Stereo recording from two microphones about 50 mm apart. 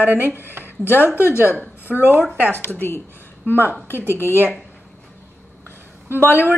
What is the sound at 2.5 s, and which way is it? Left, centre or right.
A woman's voice, left.